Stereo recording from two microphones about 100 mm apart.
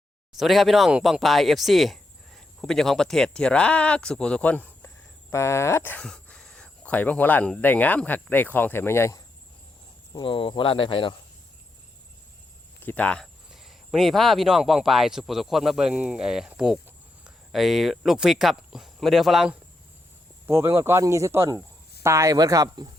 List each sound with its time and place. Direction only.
0.3 s speech: centre (ahead or behind); by 6.0 s 25° left (ahead or behind)
6.0 s speech: 5° left (ahead or behind); by 9.1 s 25° left (ahead or behind)
10.1 s speech: 50° left (ahead or behind)
12.8 s speech: 15° left (ahead or behind)
13.2 s speech: 5° right (ahead or behind)
20.5 s speech: 30° right (ahead or behind)